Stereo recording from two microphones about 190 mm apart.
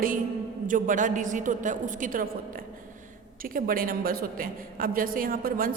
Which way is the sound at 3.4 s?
50° right (ahead or behind).